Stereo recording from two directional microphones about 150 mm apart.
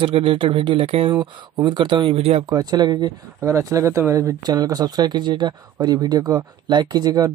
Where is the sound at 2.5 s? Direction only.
25° right (ahead or behind).